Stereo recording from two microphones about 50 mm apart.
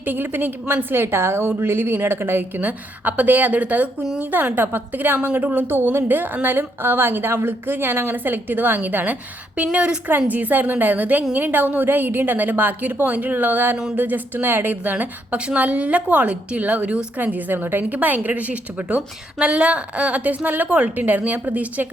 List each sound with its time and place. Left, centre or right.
0.0 s a woman's voice: right
2.6 s a woman's voice: right
5.6 s a woman's voice: right
9.7 s a woman's voice: centre
10.1 s a woman's voice: right